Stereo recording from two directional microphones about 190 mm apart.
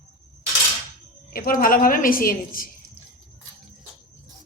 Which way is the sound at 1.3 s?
50° left (ahead or behind).